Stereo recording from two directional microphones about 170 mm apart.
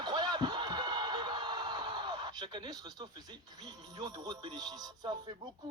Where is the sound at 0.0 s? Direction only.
25° right (ahead or behind).